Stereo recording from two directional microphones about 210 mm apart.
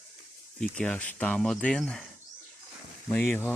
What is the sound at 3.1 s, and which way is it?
Speech, 10° left (ahead or behind).